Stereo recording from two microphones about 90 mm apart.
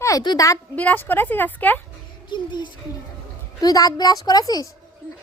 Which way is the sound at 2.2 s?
60° left (ahead or behind).